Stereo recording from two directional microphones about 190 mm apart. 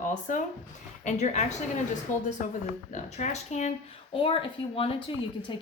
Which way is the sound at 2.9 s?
40° left (ahead or behind).